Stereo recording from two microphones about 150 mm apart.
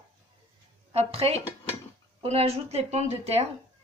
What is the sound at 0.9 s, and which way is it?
Speech, 45° right (ahead or behind).